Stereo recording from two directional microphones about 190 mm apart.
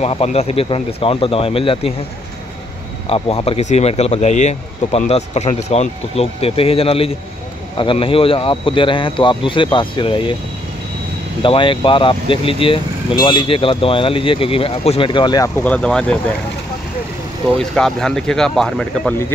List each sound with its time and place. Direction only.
0.0 s speech: 30° left (ahead or behind)
3.1 s speech: 30° left (ahead or behind)
11.4 s speech: 25° left (ahead or behind); by 16.2 s 5° left (ahead or behind)
17.6 s speech: 5° left (ahead or behind)